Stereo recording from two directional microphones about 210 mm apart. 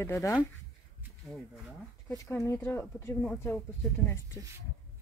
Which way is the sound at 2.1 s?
15° left (ahead or behind).